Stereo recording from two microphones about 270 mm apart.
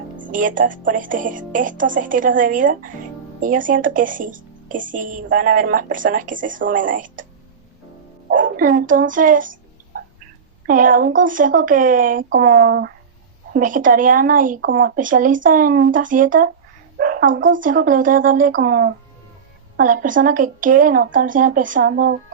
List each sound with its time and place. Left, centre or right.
0.2 s a woman's voice: right
8.3 s speech: right
9.9 s a sound: right
10.7 s a woman's voice: right
17.6 s a woman's voice: right